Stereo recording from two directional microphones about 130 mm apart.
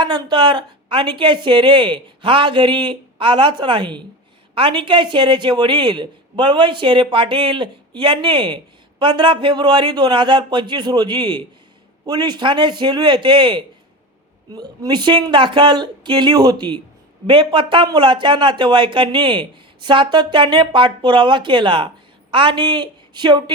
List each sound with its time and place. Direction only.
0.0 s speech: 40° right (ahead or behind)